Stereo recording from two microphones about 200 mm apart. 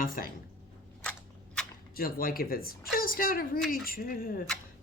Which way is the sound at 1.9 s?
45° left (ahead or behind).